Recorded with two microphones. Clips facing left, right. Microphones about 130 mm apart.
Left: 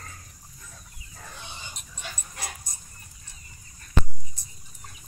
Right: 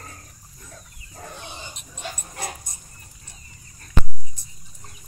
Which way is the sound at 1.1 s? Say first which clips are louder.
Right 5 dB; 40° right (ahead or behind).